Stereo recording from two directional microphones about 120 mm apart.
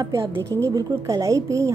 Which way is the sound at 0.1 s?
25° right (ahead or behind).